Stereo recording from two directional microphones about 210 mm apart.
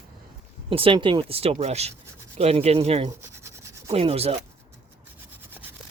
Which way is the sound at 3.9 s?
30° right (ahead or behind).